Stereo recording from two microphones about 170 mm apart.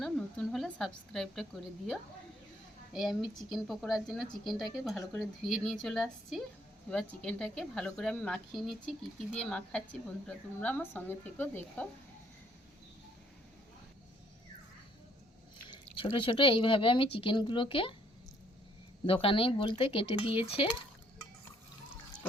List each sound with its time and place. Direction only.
0.0 s speech: centre (ahead or behind)
2.9 s a woman's voice: centre (ahead or behind)
16.0 s speech: 30° left (ahead or behind)
19.0 s speech: 30° left (ahead or behind)